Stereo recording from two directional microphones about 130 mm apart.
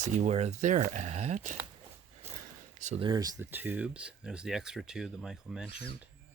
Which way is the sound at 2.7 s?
70° right (ahead or behind).